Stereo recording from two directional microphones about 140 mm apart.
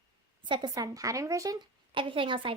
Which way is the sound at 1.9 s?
35° right (ahead or behind).